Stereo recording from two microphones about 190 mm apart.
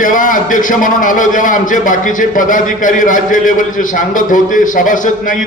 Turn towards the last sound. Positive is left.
turn(degrees=45)  # may be behind; listen again after turning